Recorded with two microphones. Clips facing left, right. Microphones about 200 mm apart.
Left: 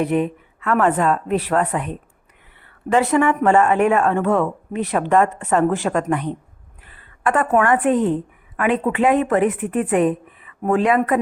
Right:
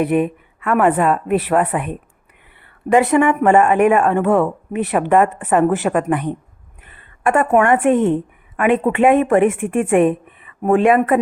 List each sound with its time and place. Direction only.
0.0 s a woman's voice: 10° right (ahead or behind)
2.9 s a woman's voice: 10° right (ahead or behind)
6.8 s a sound: 25° right (ahead or behind)
7.5 s a woman's voice: 25° right (ahead or behind)
10.1 s a sound: 15° right (ahead or behind)
10.7 s a woman's voice: 25° right (ahead or behind)